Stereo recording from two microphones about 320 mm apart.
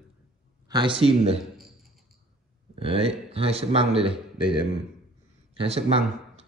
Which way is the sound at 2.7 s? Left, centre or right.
Centre.